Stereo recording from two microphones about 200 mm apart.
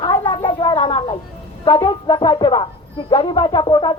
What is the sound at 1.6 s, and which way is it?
Speech, 25° left (ahead or behind).